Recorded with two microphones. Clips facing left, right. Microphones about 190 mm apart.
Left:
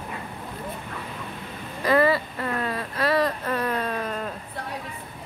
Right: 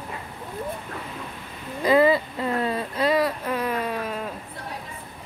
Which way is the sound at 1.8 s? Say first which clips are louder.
Right 2 dB; 15° right (ahead or behind).